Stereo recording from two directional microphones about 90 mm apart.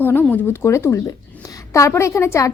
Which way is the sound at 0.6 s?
30° left (ahead or behind).